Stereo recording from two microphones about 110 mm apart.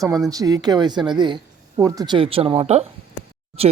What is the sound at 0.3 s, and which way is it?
Speech, 35° right (ahead or behind).